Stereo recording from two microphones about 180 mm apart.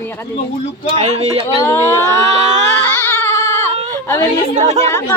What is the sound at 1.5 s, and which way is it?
Speech, 20° left (ahead or behind).